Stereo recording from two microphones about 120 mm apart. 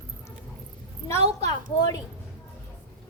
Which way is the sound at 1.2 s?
65° right (ahead or behind).